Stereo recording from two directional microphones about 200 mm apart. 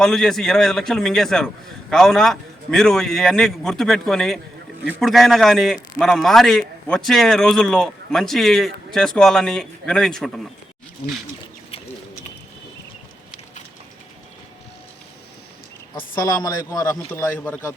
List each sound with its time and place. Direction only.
0.0 s a man's voice: centre (ahead or behind)
16.0 s speech: 15° left (ahead or behind)